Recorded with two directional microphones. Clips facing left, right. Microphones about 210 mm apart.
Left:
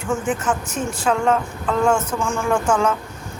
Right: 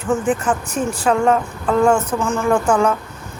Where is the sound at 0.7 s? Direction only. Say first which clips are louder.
Right 4 dB; 35° right (ahead or behind).